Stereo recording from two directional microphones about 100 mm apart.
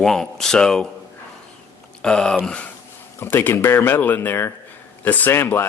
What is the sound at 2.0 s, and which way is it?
Speech, 10° left (ahead or behind).